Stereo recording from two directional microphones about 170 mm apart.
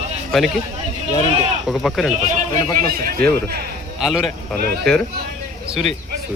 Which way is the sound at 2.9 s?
60° right (ahead or behind).